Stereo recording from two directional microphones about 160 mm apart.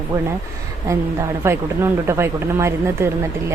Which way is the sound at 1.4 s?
15° right (ahead or behind).